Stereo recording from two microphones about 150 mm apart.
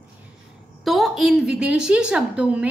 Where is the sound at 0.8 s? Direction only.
Centre (ahead or behind).